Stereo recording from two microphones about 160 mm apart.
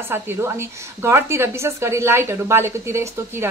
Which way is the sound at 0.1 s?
15° right (ahead or behind).